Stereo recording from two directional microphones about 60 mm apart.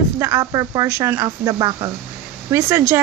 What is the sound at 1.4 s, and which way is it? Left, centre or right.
Speech, right.